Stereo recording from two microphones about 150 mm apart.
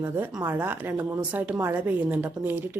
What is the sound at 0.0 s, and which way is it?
Speech, 20° right (ahead or behind).